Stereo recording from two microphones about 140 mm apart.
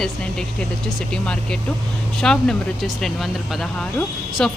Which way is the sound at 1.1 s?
5° left (ahead or behind).